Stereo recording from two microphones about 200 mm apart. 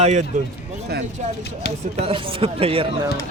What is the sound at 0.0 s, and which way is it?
Speech, 35° right (ahead or behind).